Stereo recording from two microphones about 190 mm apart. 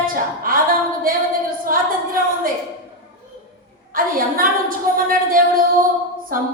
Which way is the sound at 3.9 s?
50° right (ahead or behind).